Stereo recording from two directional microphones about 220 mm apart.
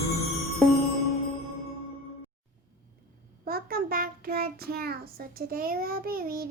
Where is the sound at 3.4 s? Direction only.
40° right (ahead or behind).